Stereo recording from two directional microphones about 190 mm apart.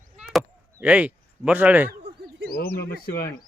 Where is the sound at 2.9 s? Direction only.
55° left (ahead or behind).